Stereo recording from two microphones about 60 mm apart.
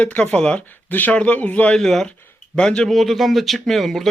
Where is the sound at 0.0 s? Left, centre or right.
Centre.